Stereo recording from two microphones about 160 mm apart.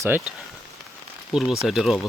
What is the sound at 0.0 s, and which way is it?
Speech, 10° right (ahead or behind).